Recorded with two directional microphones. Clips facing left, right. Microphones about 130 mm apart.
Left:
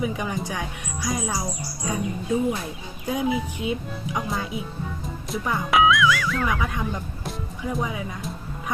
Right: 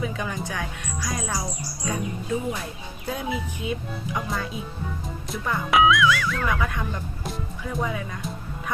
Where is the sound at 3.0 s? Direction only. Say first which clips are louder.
Left 5 dB; 15° left (ahead or behind).